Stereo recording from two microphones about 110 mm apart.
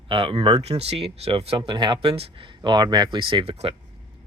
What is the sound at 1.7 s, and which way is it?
Speech, 45° right (ahead or behind).